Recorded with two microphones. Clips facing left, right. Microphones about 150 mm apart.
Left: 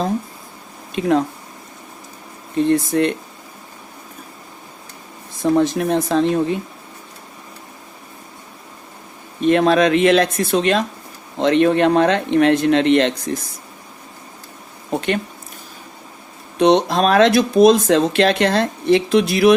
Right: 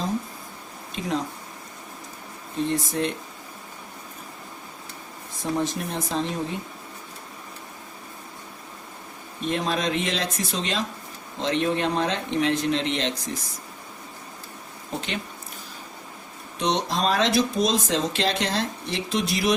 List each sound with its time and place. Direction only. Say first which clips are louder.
0.9 s speech: left 11 dB; 60° left (ahead or behind)
2.6 s speech: left 9 dB; 65° left (ahead or behind)
5.4 s speech: left 10 dB; 70° left (ahead or behind)
9.4 s speech: left 12 dB; 70° left (ahead or behind)
14.8 s speech: left 10 dB; 55° left (ahead or behind)
16.6 s speech: left 11 dB; 60° left (ahead or behind)